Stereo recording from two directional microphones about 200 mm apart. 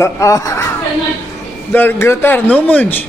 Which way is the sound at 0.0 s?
15° left (ahead or behind).